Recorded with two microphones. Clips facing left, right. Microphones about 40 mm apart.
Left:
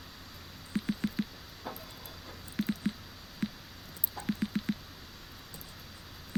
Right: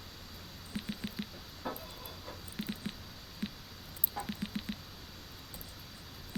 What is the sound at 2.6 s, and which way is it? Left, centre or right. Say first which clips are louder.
Music: left 8 dB; centre.